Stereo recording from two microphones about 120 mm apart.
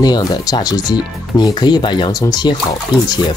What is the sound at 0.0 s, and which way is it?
Speech, 35° left (ahead or behind).